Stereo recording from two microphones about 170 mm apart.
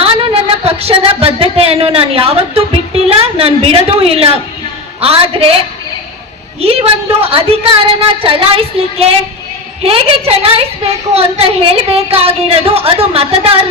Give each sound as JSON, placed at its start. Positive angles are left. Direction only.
{"t": 0.0, "sound": "a woman's voice", "side_deg": -35}
{"t": 6.6, "sound": "a woman's voice", "side_deg": -35}